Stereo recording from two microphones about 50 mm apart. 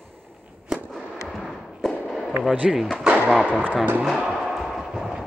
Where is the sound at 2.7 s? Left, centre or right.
Centre.